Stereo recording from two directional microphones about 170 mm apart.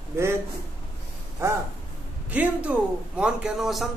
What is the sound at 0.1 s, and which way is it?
Speech, 15° right (ahead or behind).